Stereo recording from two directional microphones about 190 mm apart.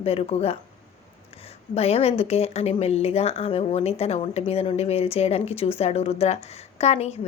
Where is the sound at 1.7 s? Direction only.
30° left (ahead or behind).